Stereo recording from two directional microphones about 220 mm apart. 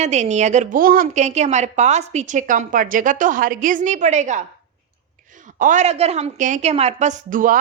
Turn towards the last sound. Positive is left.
turn(degrees=-40)  # may be behind; listen again after turning